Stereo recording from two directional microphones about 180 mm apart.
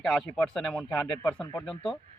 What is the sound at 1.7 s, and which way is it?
Speech, 30° left (ahead or behind).